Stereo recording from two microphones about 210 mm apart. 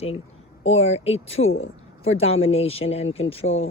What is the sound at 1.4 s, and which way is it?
Speech, 70° left (ahead or behind).